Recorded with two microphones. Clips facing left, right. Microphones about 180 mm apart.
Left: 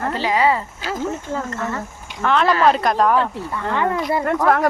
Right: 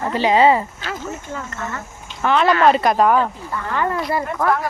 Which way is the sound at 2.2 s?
Centre (ahead or behind).